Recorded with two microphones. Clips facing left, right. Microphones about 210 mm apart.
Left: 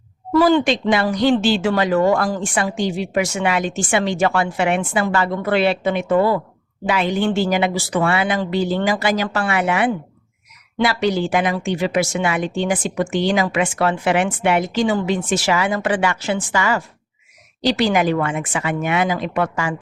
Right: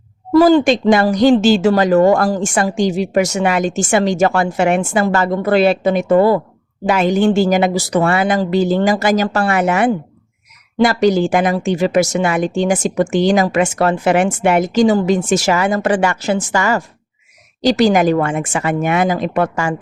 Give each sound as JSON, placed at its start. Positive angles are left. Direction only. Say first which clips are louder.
{"t": 0.3, "sound": "speech", "louder": "right 5 dB", "side_deg": -40}